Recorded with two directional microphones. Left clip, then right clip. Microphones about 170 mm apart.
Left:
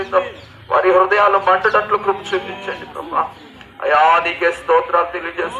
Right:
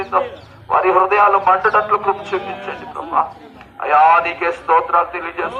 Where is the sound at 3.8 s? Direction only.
30° right (ahead or behind).